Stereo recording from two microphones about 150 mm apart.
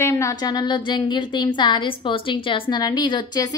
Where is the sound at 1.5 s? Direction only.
30° left (ahead or behind).